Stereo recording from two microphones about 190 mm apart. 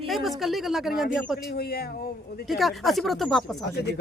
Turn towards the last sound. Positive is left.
turn(degrees=0)  # may be behind; listen again after turning